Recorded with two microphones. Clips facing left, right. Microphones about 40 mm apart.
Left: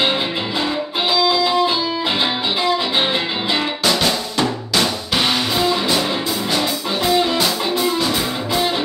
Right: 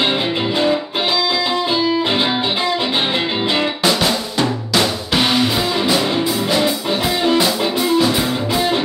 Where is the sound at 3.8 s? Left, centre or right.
Centre.